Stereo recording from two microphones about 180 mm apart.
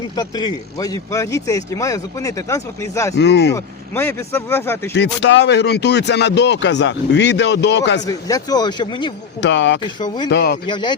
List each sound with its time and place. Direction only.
0.2 s speech: 20° left (ahead or behind)
3.2 s speech: 70° left (ahead or behind)
3.5 s speech: 15° left (ahead or behind)
4.9 s speech: 80° left
8.0 s speech: 20° left (ahead or behind)
9.4 s speech: 85° left
9.8 s speech: 25° left (ahead or behind)
10.2 s speech: 70° left (ahead or behind)
10.7 s speech: 25° left (ahead or behind)